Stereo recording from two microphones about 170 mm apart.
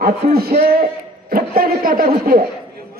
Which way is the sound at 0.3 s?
70° right (ahead or behind).